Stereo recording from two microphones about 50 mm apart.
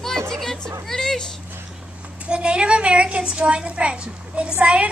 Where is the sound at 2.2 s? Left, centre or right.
Right.